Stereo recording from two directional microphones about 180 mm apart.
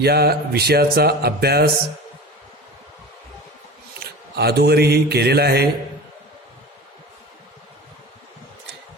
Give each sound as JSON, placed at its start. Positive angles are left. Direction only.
{"t": 0.0, "sound": "speech", "side_deg": -60}
{"t": 4.0, "sound": "speech", "side_deg": -60}